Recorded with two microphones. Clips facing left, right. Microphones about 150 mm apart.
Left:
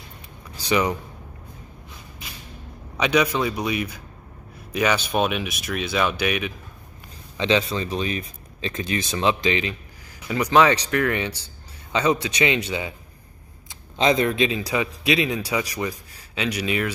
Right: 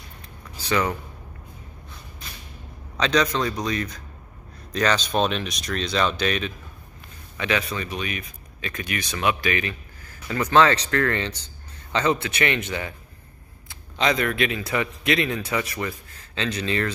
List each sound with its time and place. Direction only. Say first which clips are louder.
0.7 s a man's voice: left 2 dB; 15° left (ahead or behind)
3.0 s a man's voice: left 1 dB; 10° left (ahead or behind)
7.3 s a man's voice: left 4 dB; 25° left (ahead or behind)